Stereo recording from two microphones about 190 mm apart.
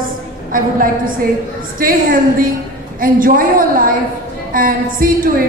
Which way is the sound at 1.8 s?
50° right (ahead or behind).